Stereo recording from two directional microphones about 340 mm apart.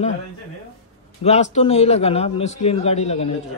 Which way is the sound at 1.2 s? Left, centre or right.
Centre.